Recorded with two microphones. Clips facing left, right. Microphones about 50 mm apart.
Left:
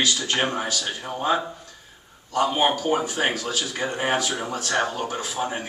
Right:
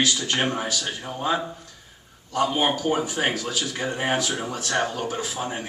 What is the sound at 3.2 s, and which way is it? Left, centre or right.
Speech, centre.